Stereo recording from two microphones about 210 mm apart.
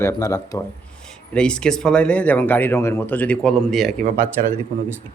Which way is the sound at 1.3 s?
5° left (ahead or behind).